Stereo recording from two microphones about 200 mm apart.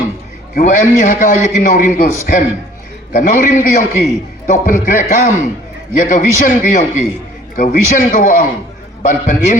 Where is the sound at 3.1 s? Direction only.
40° left (ahead or behind).